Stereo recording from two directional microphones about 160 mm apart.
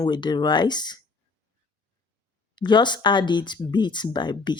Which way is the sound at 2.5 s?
30° left (ahead or behind).